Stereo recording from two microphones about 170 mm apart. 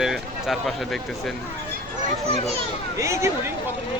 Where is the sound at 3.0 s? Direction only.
15° right (ahead or behind).